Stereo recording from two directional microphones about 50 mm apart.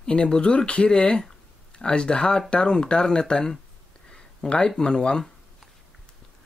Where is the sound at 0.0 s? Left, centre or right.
Centre.